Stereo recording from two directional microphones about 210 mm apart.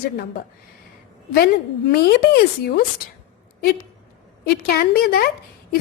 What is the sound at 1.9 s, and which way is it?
Speech, 50° left (ahead or behind).